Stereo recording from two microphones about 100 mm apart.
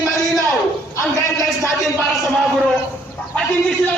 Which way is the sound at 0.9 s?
35° left (ahead or behind).